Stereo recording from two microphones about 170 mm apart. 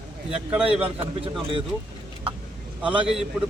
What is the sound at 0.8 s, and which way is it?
Speech, 35° right (ahead or behind).